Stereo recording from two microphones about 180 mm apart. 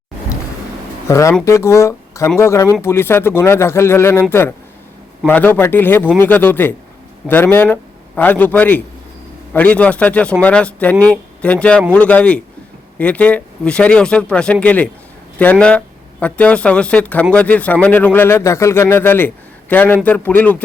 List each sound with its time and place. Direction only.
1.0 s a man's voice: 15° left (ahead or behind)